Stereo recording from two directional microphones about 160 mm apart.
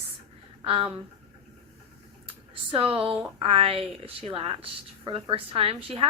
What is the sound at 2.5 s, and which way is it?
A woman's voice, 35° right (ahead or behind).